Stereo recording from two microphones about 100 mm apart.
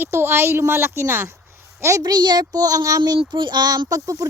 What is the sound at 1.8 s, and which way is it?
A woman's voice, 35° right (ahead or behind).